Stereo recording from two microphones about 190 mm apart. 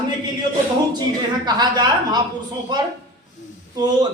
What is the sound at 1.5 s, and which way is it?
Speech, 20° right (ahead or behind).